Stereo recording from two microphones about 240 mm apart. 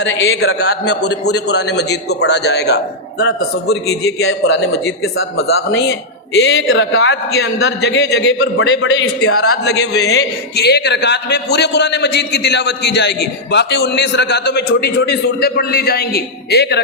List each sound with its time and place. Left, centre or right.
0.0 s a man's voice: left
9.6 s a man's voice: left